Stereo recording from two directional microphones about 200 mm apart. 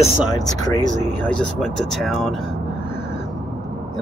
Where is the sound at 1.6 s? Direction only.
Centre (ahead or behind).